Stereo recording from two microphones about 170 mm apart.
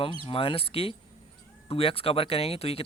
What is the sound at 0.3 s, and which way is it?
Speech, 30° left (ahead or behind).